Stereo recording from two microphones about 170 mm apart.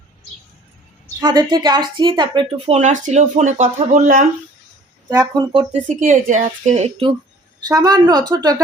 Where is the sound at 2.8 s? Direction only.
45° right (ahead or behind).